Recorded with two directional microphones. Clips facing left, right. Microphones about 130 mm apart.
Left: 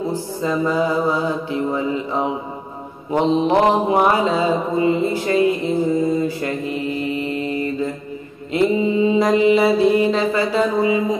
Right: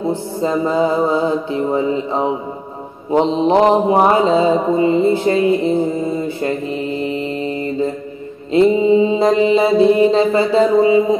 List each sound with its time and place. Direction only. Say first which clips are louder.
0.4 s mantra: right 3 dB; 30° right (ahead or behind)